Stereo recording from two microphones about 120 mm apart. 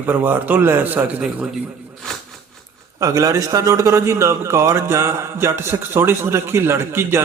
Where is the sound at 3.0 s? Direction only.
30° right (ahead or behind).